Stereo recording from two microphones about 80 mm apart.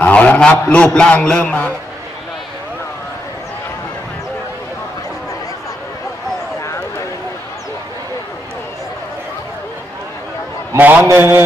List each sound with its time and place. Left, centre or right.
0.0 s a man's voice: centre
10.8 s a man's voice: right